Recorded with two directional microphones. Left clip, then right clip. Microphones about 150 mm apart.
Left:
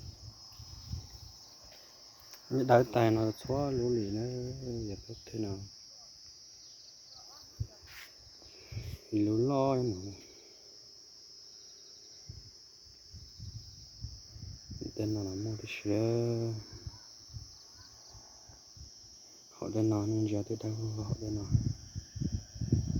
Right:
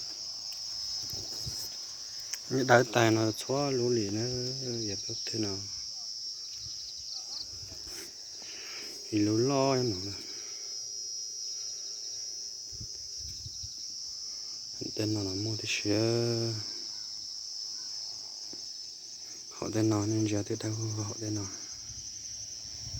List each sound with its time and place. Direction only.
2.5 s speech: 5° left (ahead or behind)
3.6 s speech: 15° right (ahead or behind)
3.9 s speech: centre (ahead or behind)
9.1 s speech: centre (ahead or behind)
14.9 s speech: centre (ahead or behind)
19.6 s speech: centre (ahead or behind)